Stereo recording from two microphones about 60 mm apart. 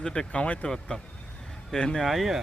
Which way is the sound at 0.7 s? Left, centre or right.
Centre.